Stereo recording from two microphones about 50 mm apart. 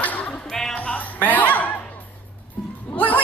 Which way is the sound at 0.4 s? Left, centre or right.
Centre.